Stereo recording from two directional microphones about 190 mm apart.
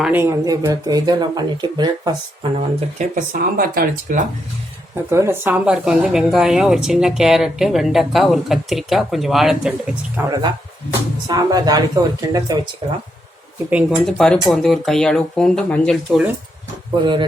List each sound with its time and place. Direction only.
0.0 s speech: 10° right (ahead or behind)
2.6 s speech: 40° right (ahead or behind)
5.0 s speech: 15° right (ahead or behind)
11.3 s speech: 20° right (ahead or behind)
13.9 s speech: 5° left (ahead or behind)
17.0 s speech: 25° right (ahead or behind)